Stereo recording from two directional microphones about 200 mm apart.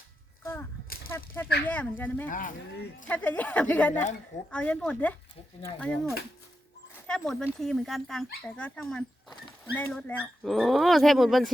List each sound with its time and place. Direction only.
0.4 s a sound: 10° left (ahead or behind)
1.6 s speech: 10° left (ahead or behind)
2.3 s speech: 40° left (ahead or behind)
3.1 s speech: 10° left (ahead or behind)